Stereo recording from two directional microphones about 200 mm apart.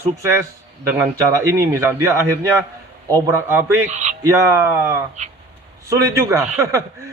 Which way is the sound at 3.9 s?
35° right (ahead or behind).